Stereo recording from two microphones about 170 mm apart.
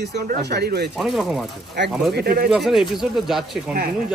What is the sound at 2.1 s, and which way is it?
Speech, 65° right (ahead or behind).